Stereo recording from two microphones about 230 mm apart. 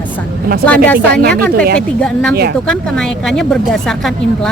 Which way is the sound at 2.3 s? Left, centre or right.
Right.